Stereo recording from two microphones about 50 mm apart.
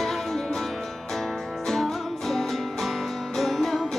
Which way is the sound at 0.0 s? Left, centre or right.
Centre.